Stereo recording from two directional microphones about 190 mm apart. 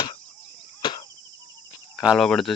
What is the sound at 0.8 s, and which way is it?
Cricket, 25° left (ahead or behind).